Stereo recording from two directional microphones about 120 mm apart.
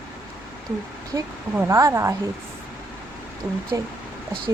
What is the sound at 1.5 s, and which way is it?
Speech, 25° right (ahead or behind).